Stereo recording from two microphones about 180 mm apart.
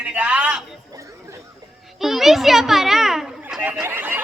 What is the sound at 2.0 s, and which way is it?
Children playing, centre (ahead or behind).